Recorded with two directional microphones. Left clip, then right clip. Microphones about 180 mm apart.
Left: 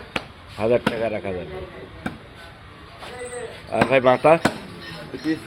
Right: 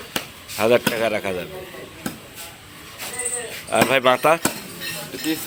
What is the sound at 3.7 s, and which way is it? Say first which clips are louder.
Speech: even; centre (ahead or behind).